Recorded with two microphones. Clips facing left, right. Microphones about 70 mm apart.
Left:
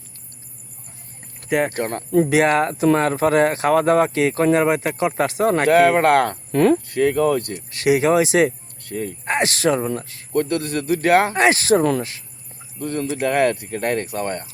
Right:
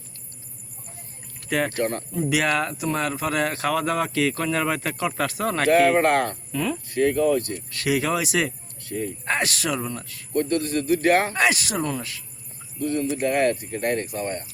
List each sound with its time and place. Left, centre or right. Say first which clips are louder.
1.5 s speech: left 4 dB; centre
1.7 s speech: left 1 dB; left
2.3 s speech: left 6 dB; left
5.6 s speech: left 2 dB; left
6.1 s speech: left 5 dB; left
7.7 s speech: left 7 dB; left
8.8 s speech: left 2 dB; left
9.2 s speech: left 7 dB; left
11.3 s speech: left 7 dB; left
11.8 s speech: left 8 dB; left
12.8 s speech: left 1 dB; left